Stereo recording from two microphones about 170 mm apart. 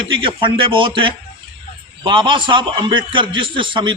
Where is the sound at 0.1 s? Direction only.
30° right (ahead or behind).